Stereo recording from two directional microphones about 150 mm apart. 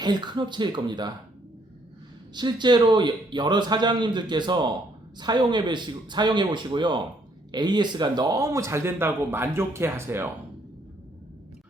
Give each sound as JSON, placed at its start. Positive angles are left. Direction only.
{"t": 0.0, "sound": "speech", "side_deg": -30}
{"t": 2.3, "sound": "speech", "side_deg": -30}